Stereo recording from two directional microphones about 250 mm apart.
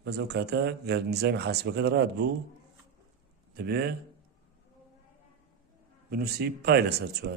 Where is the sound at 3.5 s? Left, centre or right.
Right.